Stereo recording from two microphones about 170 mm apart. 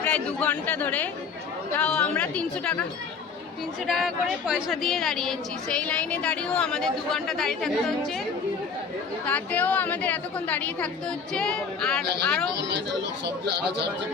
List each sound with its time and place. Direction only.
0.0 s a woman's voice: 10° left (ahead or behind)
3.8 s a woman's voice: centre (ahead or behind)
9.2 s a woman's voice: 10° left (ahead or behind)
12.6 s speech: 90° right